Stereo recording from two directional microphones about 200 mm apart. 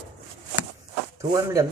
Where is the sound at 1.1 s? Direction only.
15° right (ahead or behind).